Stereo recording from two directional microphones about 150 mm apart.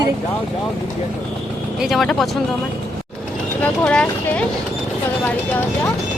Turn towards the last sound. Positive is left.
turn(degrees=10)  # may be behind; listen again after turning